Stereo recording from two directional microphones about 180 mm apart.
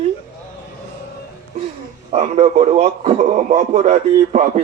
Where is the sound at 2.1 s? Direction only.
35° right (ahead or behind).